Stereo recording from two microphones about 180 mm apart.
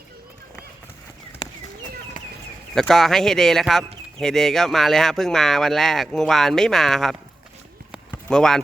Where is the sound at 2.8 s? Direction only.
Centre (ahead or behind).